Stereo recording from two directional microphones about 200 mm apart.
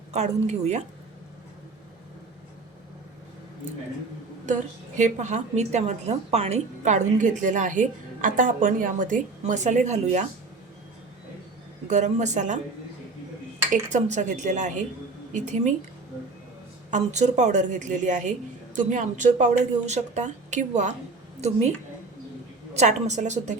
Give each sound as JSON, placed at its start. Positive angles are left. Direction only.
{"t": 0.1, "sound": "a woman's voice", "side_deg": -35}
{"t": 4.9, "sound": "a woman's voice", "side_deg": -35}
{"t": 11.9, "sound": "a woman's voice", "side_deg": -35}
{"t": 13.9, "sound": "a woman's voice", "side_deg": -40}
{"t": 16.9, "sound": "a woman's voice", "side_deg": -35}
{"t": 22.7, "sound": "a woman's voice", "side_deg": -35}